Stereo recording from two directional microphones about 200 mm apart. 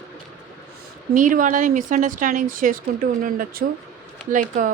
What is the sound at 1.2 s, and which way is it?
Speech, 40° right (ahead or behind).